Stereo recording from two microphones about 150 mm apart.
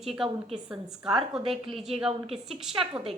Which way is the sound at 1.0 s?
5° right (ahead or behind).